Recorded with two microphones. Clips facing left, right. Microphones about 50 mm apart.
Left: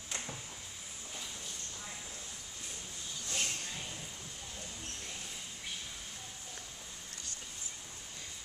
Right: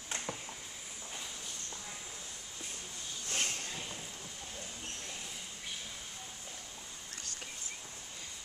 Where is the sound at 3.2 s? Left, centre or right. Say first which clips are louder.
Right 1 dB; right.